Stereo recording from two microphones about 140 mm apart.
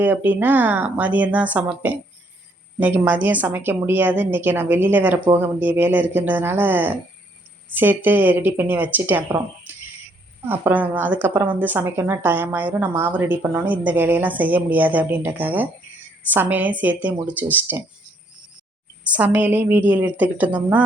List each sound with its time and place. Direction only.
0.0 s a woman's voice: 15° right (ahead or behind)
10.4 s a woman's voice: 15° right (ahead or behind)
19.0 s a woman's voice: 10° right (ahead or behind)